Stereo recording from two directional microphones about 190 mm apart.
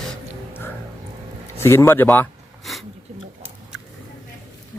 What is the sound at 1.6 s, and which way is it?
Speech, 15° left (ahead or behind).